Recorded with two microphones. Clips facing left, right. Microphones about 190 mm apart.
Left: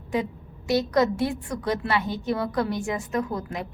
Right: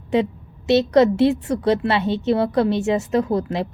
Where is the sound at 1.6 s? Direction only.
25° right (ahead or behind).